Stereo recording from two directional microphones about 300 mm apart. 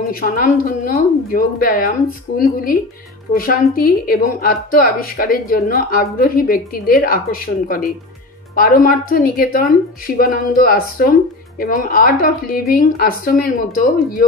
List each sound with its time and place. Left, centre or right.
0.1 s a woman's voice: left